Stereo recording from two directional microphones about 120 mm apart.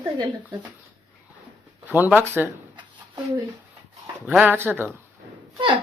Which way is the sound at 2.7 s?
40° right (ahead or behind).